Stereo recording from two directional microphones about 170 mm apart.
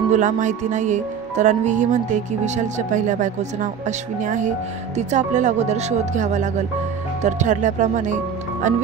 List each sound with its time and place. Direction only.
0.1 s music: 45° right (ahead or behind)